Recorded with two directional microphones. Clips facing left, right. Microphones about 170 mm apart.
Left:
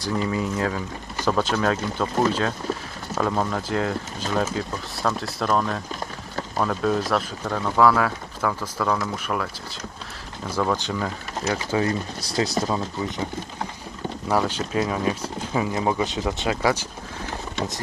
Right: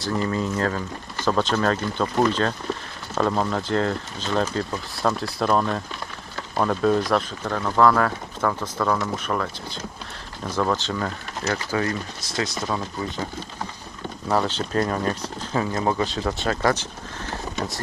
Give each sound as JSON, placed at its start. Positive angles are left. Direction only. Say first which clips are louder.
{"t": 0.1, "sound": "speech", "louder": "even", "side_deg": 10}
{"t": 10.5, "sound": "speech", "louder": "even", "side_deg": 5}
{"t": 14.3, "sound": "speech", "louder": "even", "side_deg": 10}